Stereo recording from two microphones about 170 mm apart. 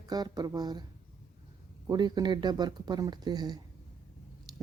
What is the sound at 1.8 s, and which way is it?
Speech, 25° right (ahead or behind).